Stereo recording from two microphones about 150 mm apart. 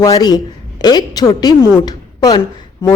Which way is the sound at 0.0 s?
25° left (ahead or behind).